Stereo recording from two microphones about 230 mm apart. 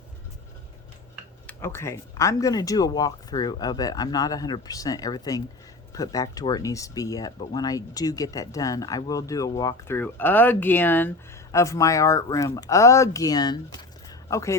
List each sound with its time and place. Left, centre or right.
1.5 s speech: centre